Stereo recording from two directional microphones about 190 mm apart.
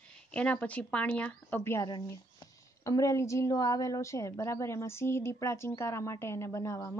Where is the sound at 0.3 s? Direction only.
5° left (ahead or behind).